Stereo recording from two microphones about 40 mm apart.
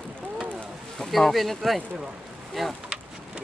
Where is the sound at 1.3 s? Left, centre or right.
Centre.